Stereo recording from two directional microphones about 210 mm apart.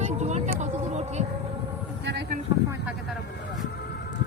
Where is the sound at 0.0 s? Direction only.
35° right (ahead or behind).